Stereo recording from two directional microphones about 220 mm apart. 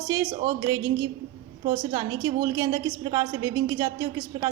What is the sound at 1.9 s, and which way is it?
A woman's voice, 15° right (ahead or behind).